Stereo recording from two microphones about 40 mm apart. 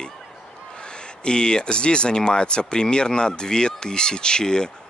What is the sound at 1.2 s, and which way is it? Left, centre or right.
Speech, left.